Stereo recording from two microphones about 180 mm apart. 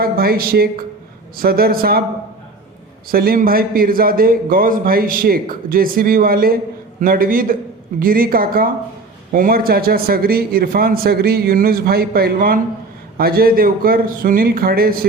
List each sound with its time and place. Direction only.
0.0 s a man's voice: 55° right (ahead or behind)
3.1 s a man's voice: 55° right (ahead or behind)